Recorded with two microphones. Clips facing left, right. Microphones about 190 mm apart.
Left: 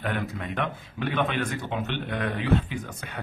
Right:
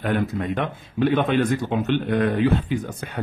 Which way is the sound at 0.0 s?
35° right (ahead or behind).